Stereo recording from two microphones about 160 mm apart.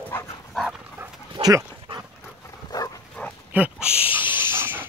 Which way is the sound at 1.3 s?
25° right (ahead or behind).